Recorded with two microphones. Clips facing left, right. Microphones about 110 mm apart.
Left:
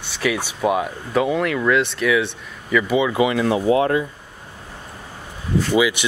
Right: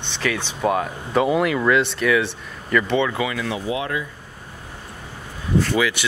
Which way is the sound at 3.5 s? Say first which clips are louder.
Left 8 dB; 40° left (ahead or behind).